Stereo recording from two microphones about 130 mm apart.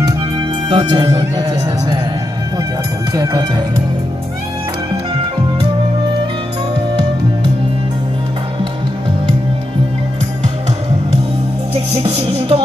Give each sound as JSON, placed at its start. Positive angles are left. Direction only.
{"t": 0.7, "sound": "speech", "side_deg": -35}
{"t": 3.1, "sound": "music", "side_deg": -30}
{"t": 11.7, "sound": "music", "side_deg": -50}